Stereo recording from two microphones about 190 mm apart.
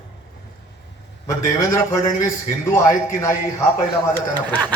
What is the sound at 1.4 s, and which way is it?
A man's voice, 15° left (ahead or behind).